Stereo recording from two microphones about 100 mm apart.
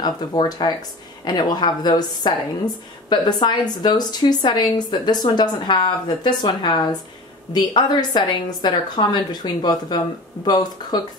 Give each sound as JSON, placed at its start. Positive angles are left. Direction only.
{"t": 0.0, "sound": "speech", "side_deg": 40}